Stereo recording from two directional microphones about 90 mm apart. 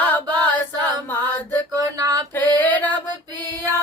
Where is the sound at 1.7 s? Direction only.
40° right (ahead or behind).